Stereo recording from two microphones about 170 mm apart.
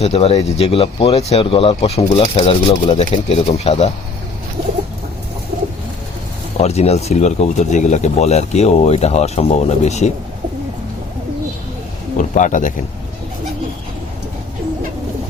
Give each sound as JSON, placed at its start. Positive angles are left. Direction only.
{"t": 0.0, "sound": "speech", "side_deg": 35}
{"t": 6.6, "sound": "speech", "side_deg": 40}
{"t": 12.1, "sound": "a man's voice", "side_deg": 50}